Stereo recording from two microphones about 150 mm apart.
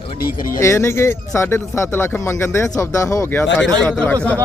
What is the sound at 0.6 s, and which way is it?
Speech, 20° left (ahead or behind).